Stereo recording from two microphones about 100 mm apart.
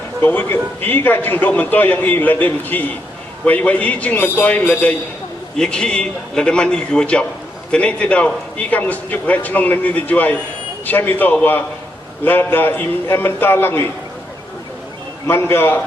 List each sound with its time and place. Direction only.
0.2 s a man's voice: 20° left (ahead or behind)
15.3 s a man's voice: 25° left (ahead or behind)